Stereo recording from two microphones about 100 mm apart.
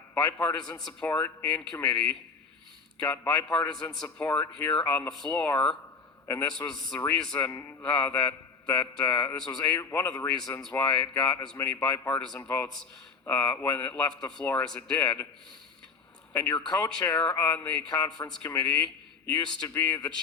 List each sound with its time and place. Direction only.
0.1 s a man's voice: 15° left (ahead or behind)
6.2 s a man's voice: 25° left (ahead or behind)
6.5 s a man's voice: 5° left (ahead or behind)
9.7 s speech: 25° left (ahead or behind)
10.2 s a man's voice: 10° left (ahead or behind)
16.3 s a man's voice: 15° left (ahead or behind)